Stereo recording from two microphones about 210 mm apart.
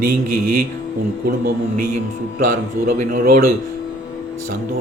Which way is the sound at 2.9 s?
40° right (ahead or behind).